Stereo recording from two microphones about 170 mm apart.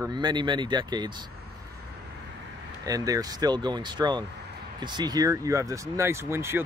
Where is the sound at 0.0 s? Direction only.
25° right (ahead or behind).